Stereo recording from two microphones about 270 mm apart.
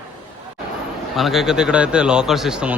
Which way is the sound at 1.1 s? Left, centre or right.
Centre.